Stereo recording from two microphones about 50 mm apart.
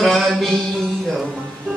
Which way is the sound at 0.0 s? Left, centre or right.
Centre.